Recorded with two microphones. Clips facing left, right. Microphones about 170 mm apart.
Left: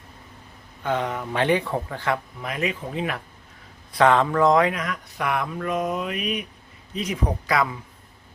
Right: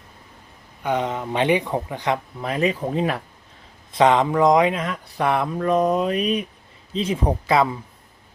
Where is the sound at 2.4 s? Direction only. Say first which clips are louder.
Right 6 dB; 35° right (ahead or behind).